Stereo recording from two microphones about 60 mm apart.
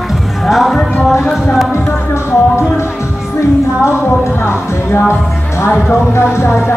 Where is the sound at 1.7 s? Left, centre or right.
Left.